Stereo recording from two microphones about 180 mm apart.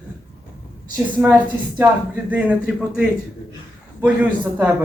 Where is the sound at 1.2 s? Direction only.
10° right (ahead or behind).